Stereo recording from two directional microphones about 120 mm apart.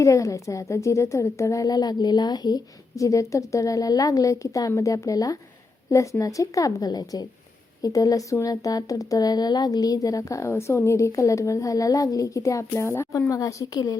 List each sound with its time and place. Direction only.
0.0 s a woman's voice: 25° left (ahead or behind)